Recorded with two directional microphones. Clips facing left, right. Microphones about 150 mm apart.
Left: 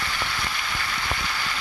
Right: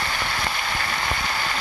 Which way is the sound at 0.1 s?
55° right (ahead or behind).